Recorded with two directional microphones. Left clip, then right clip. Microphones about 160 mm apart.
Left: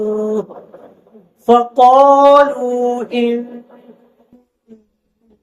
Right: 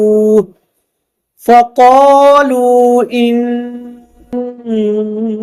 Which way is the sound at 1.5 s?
65° right (ahead or behind).